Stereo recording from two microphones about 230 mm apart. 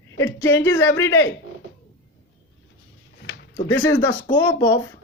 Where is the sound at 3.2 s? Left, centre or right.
Left.